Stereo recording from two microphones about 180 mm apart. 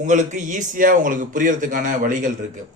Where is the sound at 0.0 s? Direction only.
45° right (ahead or behind).